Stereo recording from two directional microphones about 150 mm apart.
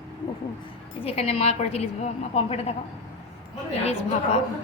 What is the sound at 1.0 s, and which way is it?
A woman's voice, 45° left (ahead or behind).